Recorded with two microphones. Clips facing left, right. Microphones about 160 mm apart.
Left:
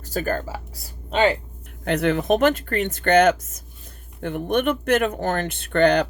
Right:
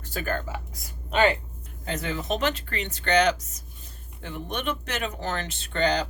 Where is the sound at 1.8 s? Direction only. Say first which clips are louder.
Left 10 dB; 65° left (ahead or behind).